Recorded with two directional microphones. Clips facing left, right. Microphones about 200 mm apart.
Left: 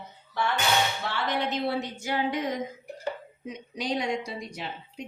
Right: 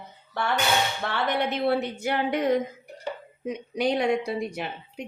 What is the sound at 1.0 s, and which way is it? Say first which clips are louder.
A woman's voice: right 3 dB; 60° right (ahead or behind).